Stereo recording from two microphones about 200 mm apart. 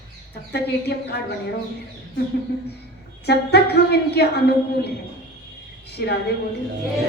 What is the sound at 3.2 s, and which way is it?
A woman's voice, 55° left (ahead or behind).